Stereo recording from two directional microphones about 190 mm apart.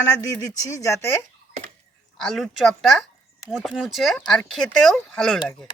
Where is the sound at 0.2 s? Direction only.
15° left (ahead or behind).